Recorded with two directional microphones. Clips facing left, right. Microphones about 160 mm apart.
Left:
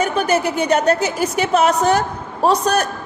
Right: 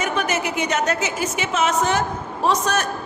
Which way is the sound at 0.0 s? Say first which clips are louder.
Left 5 dB; 35° left (ahead or behind).